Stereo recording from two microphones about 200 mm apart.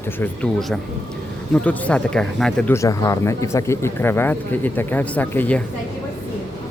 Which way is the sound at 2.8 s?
15° left (ahead or behind).